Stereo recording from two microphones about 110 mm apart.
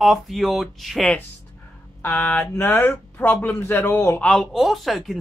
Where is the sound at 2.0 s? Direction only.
15° left (ahead or behind).